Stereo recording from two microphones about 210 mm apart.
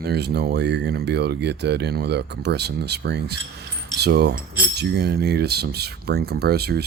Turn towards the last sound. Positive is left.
turn(degrees=-50)  # may be behind; listen again after turning